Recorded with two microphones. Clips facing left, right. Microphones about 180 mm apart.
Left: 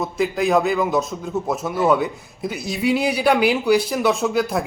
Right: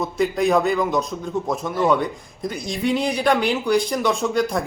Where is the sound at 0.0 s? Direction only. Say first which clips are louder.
Right 1 dB; centre (ahead or behind).